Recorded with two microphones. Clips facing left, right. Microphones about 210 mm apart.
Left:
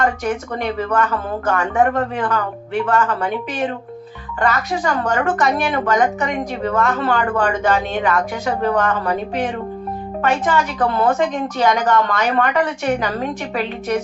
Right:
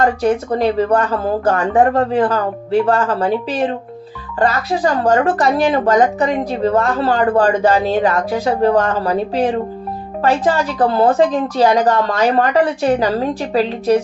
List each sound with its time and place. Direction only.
0.0 s speech: 35° right (ahead or behind)